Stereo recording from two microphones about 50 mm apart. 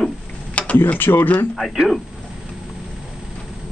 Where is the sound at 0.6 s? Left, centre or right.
Left.